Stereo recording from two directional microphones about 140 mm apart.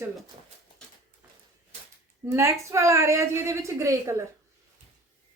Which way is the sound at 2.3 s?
20° right (ahead or behind).